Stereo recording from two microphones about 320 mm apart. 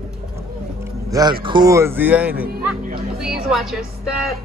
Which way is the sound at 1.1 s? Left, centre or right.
Centre.